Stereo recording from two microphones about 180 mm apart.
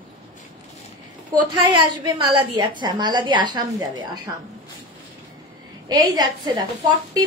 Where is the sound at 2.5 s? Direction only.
25° right (ahead or behind).